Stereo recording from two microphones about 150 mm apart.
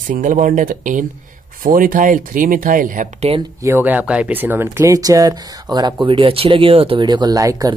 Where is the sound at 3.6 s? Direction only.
15° right (ahead or behind).